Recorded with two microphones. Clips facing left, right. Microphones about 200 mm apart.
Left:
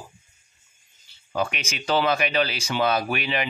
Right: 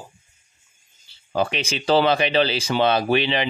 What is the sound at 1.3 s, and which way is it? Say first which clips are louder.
Speech: right 4 dB; 30° right (ahead or behind).